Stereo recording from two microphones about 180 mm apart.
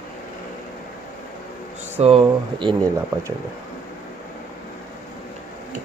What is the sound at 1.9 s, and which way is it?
Speech, 35° right (ahead or behind).